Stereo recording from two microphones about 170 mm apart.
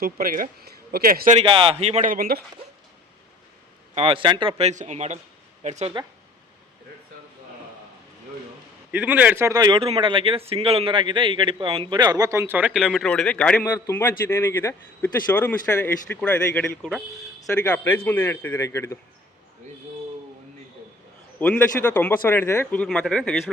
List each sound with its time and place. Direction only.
0.0 s a man's voice: 55° right (ahead or behind)
1.4 s speech: 35° right (ahead or behind)
2.0 s a man's voice: 60° right (ahead or behind)
3.9 s speech: 35° right (ahead or behind)
8.9 s speech: 10° right (ahead or behind); by 18.9 s 15° left (ahead or behind)
21.3 s speech: 10° left (ahead or behind)